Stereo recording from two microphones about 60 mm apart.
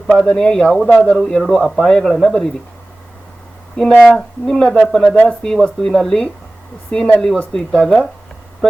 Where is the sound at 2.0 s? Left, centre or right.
Centre.